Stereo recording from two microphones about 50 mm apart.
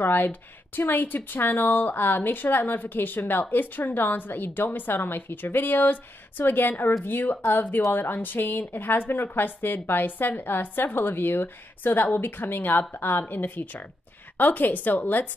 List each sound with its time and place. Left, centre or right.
0.0 s a woman's voice: left